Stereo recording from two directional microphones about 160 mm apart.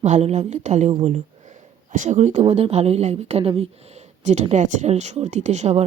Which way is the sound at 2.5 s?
40° right (ahead or behind).